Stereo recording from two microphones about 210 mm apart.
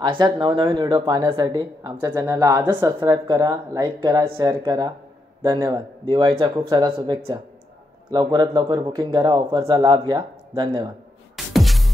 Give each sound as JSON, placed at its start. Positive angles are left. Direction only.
{"t": 0.0, "sound": "a man's voice", "side_deg": -20}
{"t": 11.3, "sound": "music", "side_deg": 0}